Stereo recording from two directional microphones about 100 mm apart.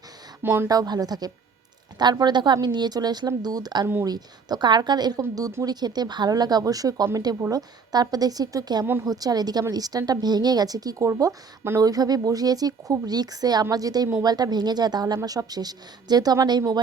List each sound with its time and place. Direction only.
0.4 s speech: 20° right (ahead or behind)
0.7 s a woman's voice: 40° right (ahead or behind)
5.6 s speech: 45° right (ahead or behind)